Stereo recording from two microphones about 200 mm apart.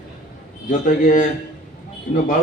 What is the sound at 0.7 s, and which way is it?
Speech, 40° left (ahead or behind).